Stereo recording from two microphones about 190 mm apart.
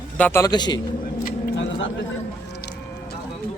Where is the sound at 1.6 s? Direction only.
75° left (ahead or behind).